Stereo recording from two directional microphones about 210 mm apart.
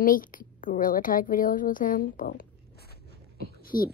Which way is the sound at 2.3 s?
50° left (ahead or behind).